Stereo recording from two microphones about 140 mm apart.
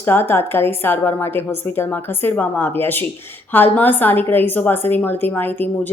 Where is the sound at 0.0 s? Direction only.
15° left (ahead or behind).